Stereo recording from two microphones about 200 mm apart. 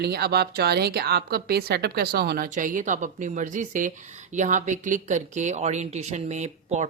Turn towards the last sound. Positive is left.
turn(degrees=-35)  # may be behind; listen again after turning